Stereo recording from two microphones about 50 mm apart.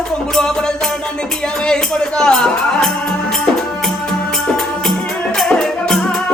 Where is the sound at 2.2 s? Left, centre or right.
Centre.